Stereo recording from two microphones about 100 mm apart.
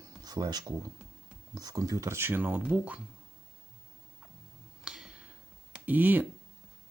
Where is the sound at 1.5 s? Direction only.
40° right (ahead or behind).